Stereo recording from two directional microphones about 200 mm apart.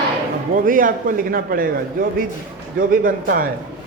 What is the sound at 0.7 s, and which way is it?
Speech, 45° right (ahead or behind).